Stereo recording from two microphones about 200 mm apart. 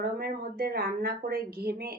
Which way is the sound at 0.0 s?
50° right (ahead or behind).